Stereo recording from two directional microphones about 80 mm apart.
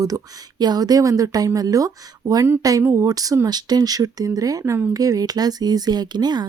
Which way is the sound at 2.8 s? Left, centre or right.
Right.